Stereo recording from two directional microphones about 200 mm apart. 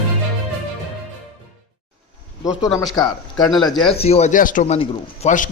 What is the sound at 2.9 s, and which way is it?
Speech, 20° left (ahead or behind).